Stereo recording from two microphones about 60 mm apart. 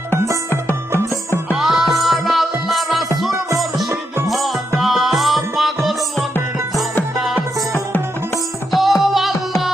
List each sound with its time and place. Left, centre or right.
0.5 s music: left
1.5 s music: centre
8.7 s music: centre